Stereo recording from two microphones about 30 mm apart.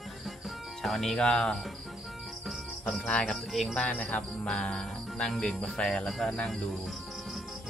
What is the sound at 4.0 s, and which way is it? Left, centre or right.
Music, left.